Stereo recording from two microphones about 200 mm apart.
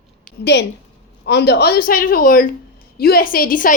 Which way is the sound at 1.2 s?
60° left (ahead or behind).